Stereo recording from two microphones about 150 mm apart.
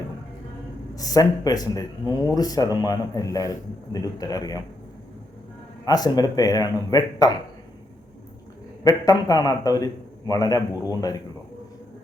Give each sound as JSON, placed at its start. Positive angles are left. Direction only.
{"t": 0.9, "sound": "speech", "side_deg": 25}
{"t": 5.8, "sound": "speech", "side_deg": 25}
{"t": 8.8, "sound": "speech", "side_deg": 25}